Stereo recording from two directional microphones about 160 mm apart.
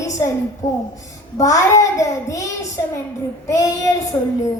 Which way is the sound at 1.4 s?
20° left (ahead or behind).